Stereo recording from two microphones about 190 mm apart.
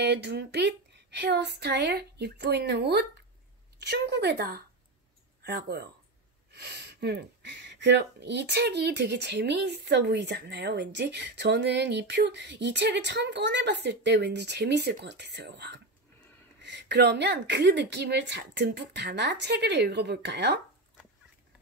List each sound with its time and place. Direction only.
0.0 s speech: 60° right (ahead or behind)